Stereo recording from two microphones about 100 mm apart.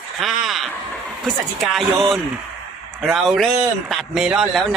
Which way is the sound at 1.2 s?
Centre (ahead or behind).